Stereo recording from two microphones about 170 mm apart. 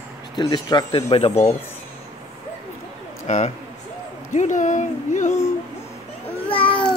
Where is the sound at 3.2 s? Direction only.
45° left (ahead or behind).